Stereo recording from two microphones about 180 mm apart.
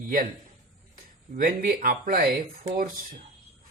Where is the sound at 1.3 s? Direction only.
50° right (ahead or behind).